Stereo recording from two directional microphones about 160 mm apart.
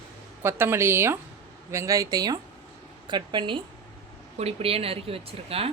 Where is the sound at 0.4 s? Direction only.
15° right (ahead or behind); by 5.7 s 40° right (ahead or behind).